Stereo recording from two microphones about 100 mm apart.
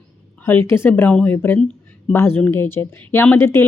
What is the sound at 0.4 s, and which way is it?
A woman's voice, 25° left (ahead or behind).